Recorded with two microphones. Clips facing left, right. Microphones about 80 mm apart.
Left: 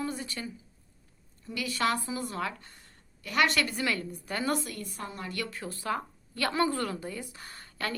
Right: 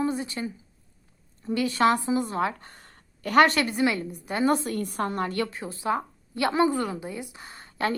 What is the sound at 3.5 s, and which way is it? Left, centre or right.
Speech, right.